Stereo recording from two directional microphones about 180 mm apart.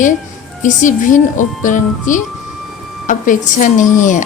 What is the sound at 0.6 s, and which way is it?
Speech, 45° left (ahead or behind).